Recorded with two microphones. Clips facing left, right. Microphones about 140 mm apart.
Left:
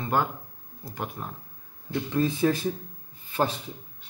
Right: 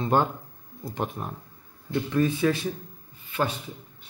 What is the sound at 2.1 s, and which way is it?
Speech, 35° left (ahead or behind).